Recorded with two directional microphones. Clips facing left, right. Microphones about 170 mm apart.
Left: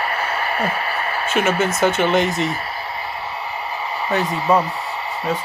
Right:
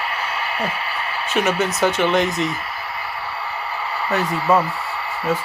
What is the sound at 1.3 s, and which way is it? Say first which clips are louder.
Speech: left 1 dB; centre (ahead or behind).